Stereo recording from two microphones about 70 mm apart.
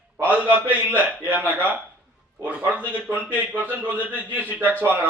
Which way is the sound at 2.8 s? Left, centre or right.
Left.